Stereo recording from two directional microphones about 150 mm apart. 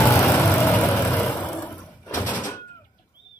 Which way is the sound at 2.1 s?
10° left (ahead or behind).